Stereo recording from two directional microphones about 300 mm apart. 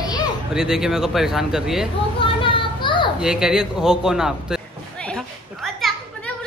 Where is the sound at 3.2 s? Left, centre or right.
Centre.